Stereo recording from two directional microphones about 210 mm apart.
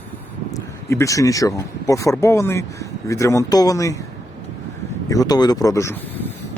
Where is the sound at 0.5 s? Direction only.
15° left (ahead or behind).